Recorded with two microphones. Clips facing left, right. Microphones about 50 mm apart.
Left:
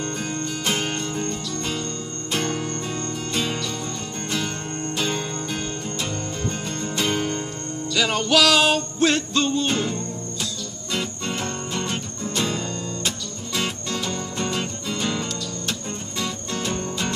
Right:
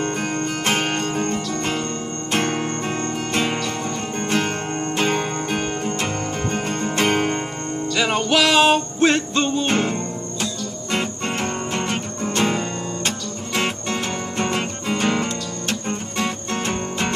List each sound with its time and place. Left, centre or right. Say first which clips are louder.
0.0 s music: right 5 dB; right
4.9 s music: right 5 dB; right
7.9 s music: right 1 dB; right
9.7 s music: right 4 dB; right